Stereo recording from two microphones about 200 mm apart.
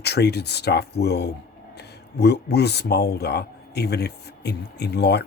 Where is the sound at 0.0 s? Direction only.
55° left (ahead or behind).